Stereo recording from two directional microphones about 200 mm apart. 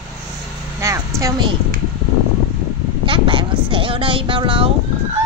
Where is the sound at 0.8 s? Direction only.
15° right (ahead or behind).